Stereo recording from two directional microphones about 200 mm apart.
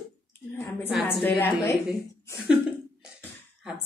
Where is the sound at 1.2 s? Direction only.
10° left (ahead or behind).